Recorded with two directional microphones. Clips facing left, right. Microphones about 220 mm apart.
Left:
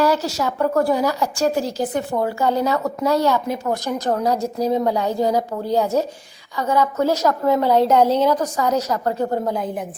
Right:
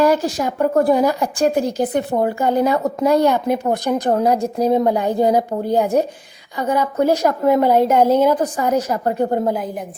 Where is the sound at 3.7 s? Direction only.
55° right (ahead or behind).